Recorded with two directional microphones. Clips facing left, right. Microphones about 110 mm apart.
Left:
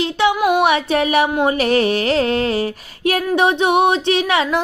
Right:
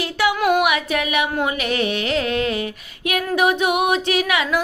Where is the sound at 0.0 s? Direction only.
25° left (ahead or behind).